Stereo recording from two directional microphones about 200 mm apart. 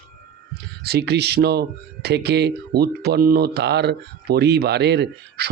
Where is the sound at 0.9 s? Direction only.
55° right (ahead or behind).